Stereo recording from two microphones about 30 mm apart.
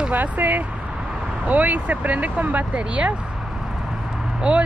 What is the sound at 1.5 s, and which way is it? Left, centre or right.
Speech, right.